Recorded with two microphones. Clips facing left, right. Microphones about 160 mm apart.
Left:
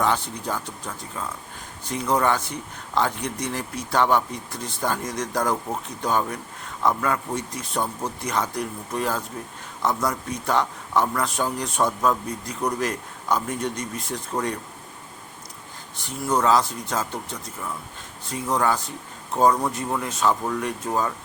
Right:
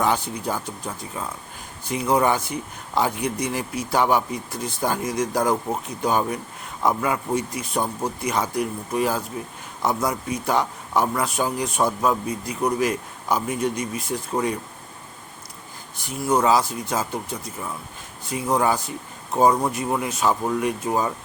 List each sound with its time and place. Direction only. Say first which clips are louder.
0.0 s a man's voice: right 1 dB; 10° right (ahead or behind)
16.0 s a man's voice: right 2 dB; 10° right (ahead or behind)